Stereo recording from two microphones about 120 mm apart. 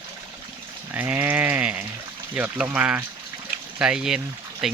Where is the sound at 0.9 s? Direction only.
15° right (ahead or behind).